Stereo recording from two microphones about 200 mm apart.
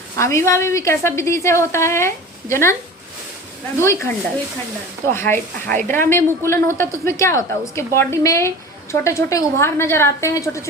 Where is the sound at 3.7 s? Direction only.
15° left (ahead or behind).